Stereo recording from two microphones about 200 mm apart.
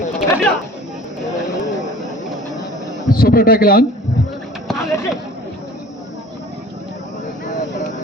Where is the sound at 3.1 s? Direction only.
50° left (ahead or behind).